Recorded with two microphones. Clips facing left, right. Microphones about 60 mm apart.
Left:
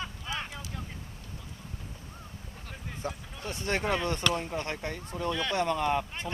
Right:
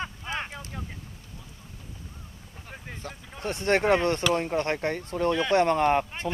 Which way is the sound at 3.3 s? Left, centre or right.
Right.